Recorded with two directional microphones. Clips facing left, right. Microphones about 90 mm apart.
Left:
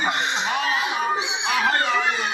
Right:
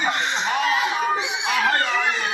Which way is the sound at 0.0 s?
30° left (ahead or behind).